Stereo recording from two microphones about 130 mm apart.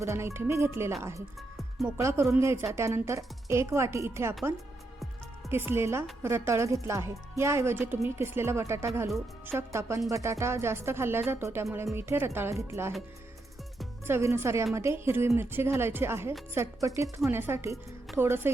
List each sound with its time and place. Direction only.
0.0 s speech: 20° right (ahead or behind)
1.4 s music: centre (ahead or behind)
2.0 s speech: 20° right (ahead or behind)
5.5 s speech: 15° right (ahead or behind)
14.1 s a woman's voice: 20° right (ahead or behind)